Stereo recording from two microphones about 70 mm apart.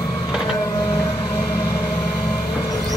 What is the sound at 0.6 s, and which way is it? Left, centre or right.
Printer, left.